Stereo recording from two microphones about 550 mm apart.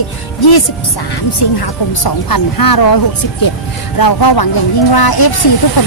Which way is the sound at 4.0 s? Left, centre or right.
Left.